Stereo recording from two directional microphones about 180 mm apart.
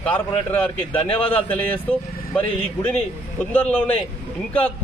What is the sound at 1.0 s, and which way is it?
Speech, 30° left (ahead or behind).